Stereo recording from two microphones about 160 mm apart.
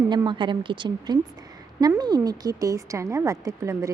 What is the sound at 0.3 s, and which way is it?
Speech, 30° right (ahead or behind).